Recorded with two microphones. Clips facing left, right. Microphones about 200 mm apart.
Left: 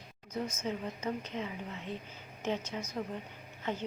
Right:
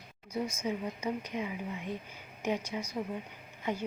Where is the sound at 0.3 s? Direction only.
10° right (ahead or behind).